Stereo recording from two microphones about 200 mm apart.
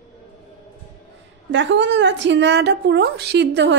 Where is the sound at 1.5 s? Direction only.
65° right (ahead or behind).